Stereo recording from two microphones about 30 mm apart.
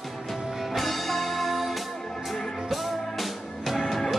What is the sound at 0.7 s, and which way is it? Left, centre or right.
Music, centre.